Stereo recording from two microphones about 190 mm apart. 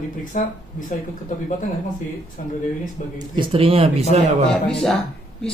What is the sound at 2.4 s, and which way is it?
Speech, 45° left (ahead or behind).